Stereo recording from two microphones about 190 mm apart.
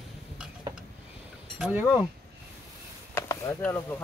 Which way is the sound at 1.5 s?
5° right (ahead or behind).